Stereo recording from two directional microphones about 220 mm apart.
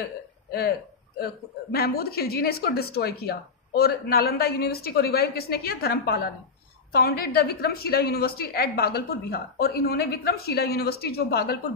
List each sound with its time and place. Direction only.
0.0 s throat clearing: 45° left (ahead or behind)
1.2 s speech: 45° left (ahead or behind)